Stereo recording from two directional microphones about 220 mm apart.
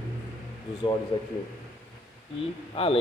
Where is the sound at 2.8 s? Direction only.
25° left (ahead or behind).